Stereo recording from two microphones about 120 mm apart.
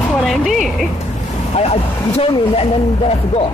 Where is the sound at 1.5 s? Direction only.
60° left (ahead or behind).